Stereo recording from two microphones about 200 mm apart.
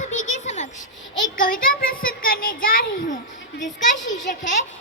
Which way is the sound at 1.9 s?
45° left (ahead or behind).